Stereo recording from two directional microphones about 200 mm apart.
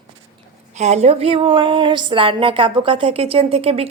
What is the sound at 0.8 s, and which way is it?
A woman's voice, 35° right (ahead or behind).